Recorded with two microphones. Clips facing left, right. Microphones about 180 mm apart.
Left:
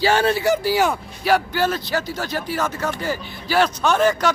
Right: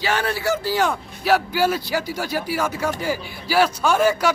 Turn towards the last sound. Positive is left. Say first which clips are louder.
# even
turn(degrees=-10)  # may be behind; listen again after turning